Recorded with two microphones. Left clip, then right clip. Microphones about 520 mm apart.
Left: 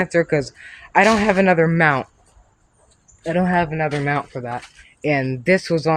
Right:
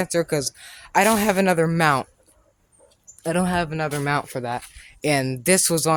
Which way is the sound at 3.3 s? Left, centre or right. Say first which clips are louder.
Left 4 dB; right.